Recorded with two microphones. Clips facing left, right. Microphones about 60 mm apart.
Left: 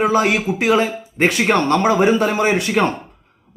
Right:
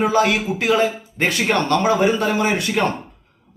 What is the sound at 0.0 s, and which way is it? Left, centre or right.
A man's voice, left.